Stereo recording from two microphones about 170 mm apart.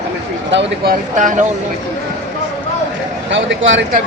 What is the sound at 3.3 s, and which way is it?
Speech, 90° right.